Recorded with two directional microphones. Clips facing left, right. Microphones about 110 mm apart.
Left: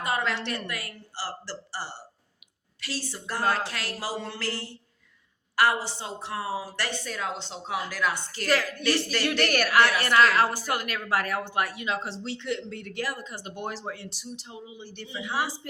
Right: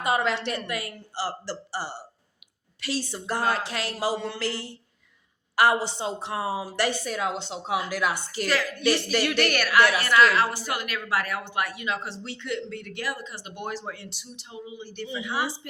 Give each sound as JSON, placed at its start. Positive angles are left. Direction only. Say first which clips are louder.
{"t": 0.0, "sound": "a woman's voice", "louder": "right 4 dB", "side_deg": -20}
{"t": 9.5, "sound": "a woman's voice", "louder": "even", "side_deg": 40}